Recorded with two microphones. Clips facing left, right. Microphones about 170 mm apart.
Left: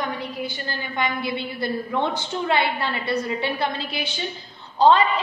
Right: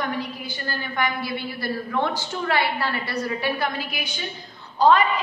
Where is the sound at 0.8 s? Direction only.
20° left (ahead or behind).